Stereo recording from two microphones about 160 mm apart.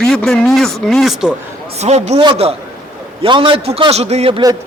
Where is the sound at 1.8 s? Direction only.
45° right (ahead or behind).